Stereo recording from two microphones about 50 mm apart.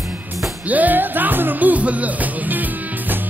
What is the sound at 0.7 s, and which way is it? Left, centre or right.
Music, right.